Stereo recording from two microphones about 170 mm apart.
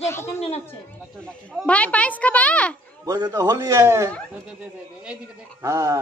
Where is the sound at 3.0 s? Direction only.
20° right (ahead or behind).